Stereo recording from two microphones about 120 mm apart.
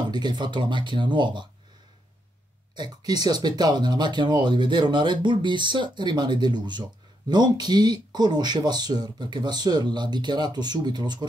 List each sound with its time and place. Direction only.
0.1 s speech: 40° right (ahead or behind)
2.7 s speech: 35° right (ahead or behind)